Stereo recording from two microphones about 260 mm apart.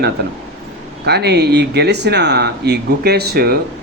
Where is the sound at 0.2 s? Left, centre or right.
Right.